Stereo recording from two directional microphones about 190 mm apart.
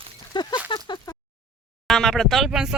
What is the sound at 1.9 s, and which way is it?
Speech, centre (ahead or behind).